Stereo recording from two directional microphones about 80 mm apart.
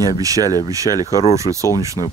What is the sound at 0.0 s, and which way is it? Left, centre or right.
Speech, right.